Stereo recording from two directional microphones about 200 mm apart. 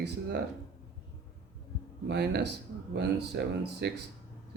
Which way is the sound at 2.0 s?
55° right (ahead or behind).